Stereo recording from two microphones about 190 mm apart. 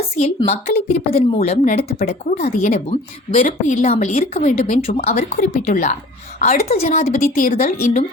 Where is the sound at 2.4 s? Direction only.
50° left (ahead or behind).